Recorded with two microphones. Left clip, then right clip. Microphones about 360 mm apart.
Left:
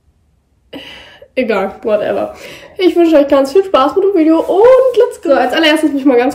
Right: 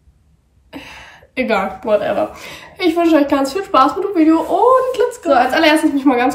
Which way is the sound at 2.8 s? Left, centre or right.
Left.